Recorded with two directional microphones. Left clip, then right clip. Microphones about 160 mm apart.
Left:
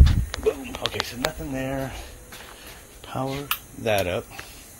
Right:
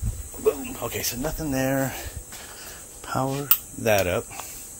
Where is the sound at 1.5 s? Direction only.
45° right (ahead or behind).